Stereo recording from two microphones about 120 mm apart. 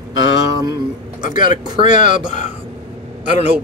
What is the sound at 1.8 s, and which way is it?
Speech, 90° left.